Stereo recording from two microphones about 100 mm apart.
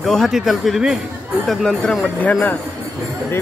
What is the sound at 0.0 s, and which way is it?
Speech, centre (ahead or behind).